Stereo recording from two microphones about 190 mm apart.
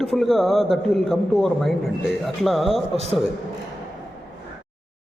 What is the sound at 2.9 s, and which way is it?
Speech, 35° right (ahead or behind).